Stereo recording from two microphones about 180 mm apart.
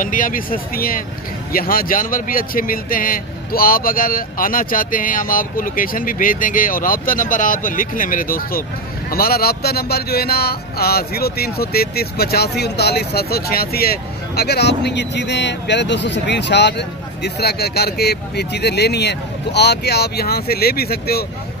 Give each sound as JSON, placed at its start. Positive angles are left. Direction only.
{"t": 0.0, "sound": "speech", "side_deg": 50}